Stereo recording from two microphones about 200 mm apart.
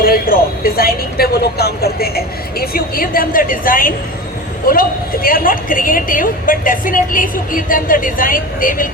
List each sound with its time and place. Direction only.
0.0 s a woman's voice: 45° left (ahead or behind)